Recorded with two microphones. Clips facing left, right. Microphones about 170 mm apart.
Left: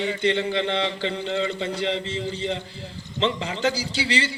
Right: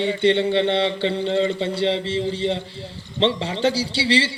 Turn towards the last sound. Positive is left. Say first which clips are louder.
# right 5 dB
turn(degrees=-30)  # may be behind; listen again after turning